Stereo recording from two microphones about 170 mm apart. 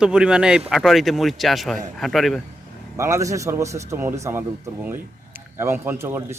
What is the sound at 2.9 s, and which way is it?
A man's voice, 15° right (ahead or behind).